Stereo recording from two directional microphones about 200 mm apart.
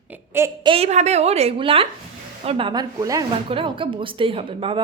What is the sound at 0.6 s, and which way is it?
A woman's voice, 30° right (ahead or behind).